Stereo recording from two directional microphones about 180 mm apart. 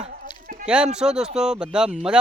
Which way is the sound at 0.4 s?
45° right (ahead or behind).